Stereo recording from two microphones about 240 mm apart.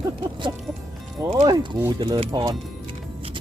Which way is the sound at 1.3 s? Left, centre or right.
Centre.